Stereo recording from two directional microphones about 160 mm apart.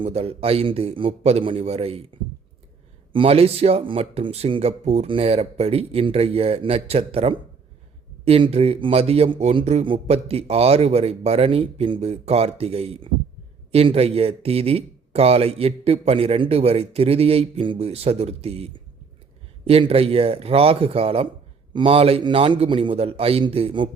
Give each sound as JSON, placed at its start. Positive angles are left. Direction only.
{"t": 0.0, "sound": "speech", "side_deg": -40}
{"t": 3.1, "sound": "speech", "side_deg": -35}